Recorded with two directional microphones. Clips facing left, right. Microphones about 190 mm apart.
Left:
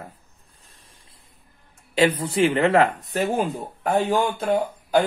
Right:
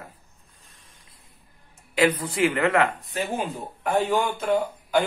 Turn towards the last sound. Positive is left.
turn(degrees=40)  # may be behind; listen again after turning